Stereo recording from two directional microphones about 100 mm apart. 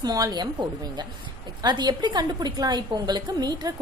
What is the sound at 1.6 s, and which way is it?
A woman's voice, 45° right (ahead or behind).